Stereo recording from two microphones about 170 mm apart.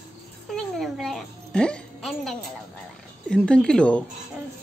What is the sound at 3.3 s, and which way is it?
Speech, 5° left (ahead or behind).